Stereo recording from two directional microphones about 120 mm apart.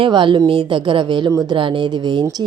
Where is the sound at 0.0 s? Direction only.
45° right (ahead or behind).